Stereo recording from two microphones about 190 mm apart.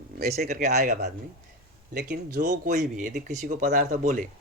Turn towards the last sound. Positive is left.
turn(degrees=-45)  # may be behind; listen again after turning